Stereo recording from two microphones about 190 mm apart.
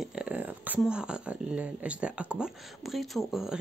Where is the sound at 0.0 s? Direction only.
5° right (ahead or behind).